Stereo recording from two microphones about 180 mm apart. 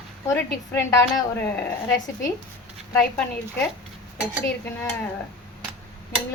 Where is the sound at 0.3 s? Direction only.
15° left (ahead or behind).